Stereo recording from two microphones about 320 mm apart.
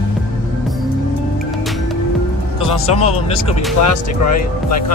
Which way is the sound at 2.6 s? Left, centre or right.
Centre.